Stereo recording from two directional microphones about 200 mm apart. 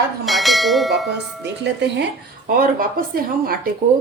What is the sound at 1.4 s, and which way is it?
Speech, 60° right (ahead or behind).